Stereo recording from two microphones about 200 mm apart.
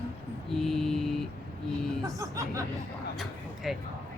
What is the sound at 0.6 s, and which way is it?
Mantra, centre (ahead or behind).